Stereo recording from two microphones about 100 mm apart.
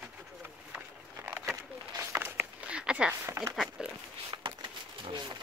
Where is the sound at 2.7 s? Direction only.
10° right (ahead or behind).